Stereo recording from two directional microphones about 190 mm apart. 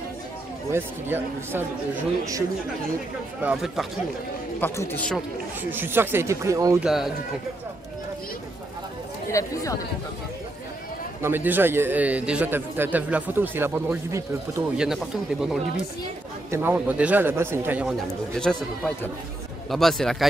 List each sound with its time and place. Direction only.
0.7 s a man's voice: 10° right (ahead or behind)
3.4 s speech: centre (ahead or behind)
4.6 s a man's voice: 10° left (ahead or behind)
5.1 s a man's voice: 10° right (ahead or behind)
6.8 s speech: centre (ahead or behind)
9.3 s a man's voice: 15° left (ahead or behind)
11.2 s a man's voice: 10° right (ahead or behind)
14.9 s speech: centre (ahead or behind)
16.4 s a man's voice: 10° right (ahead or behind)
18.3 s speech: 5° left (ahead or behind)